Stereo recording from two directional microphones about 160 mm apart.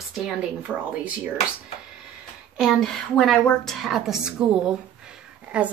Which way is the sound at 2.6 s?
Centre (ahead or behind).